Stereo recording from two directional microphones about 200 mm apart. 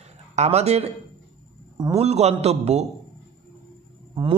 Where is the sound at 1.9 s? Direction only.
35° right (ahead or behind).